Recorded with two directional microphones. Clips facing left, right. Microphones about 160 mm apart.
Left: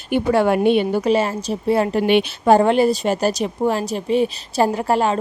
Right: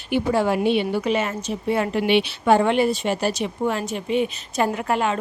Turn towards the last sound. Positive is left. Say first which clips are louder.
# left 4 dB
turn(degrees=35)  # may be behind; listen again after turning